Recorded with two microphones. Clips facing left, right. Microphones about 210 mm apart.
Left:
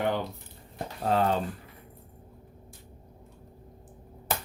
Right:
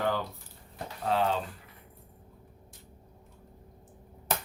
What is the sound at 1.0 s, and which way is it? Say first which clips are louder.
Speech: left 3 dB; 45° left (ahead or behind).